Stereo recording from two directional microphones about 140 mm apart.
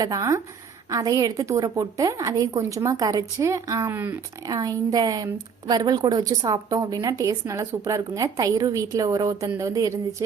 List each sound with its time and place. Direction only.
0.0 s a woman's voice: 25° right (ahead or behind)